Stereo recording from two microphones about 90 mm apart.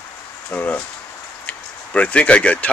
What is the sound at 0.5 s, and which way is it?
Speech, 20° left (ahead or behind).